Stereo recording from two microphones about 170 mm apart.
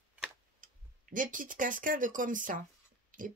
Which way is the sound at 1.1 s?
50° right (ahead or behind).